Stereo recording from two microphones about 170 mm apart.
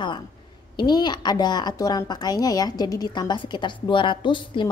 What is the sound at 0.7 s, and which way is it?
A woman's voice, 25° left (ahead or behind).